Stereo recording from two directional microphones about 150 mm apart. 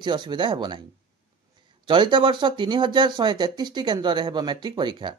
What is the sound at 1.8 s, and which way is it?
Speech, 30° right (ahead or behind).